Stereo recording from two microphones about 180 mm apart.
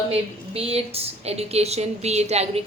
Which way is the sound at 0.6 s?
35° right (ahead or behind).